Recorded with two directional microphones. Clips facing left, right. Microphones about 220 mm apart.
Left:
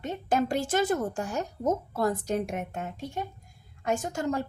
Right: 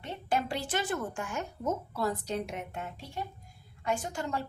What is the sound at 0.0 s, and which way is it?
A woman's voice, 45° left (ahead or behind).